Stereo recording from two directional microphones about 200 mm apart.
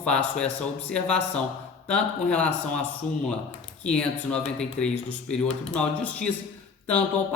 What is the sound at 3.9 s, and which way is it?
Speech, 5° left (ahead or behind).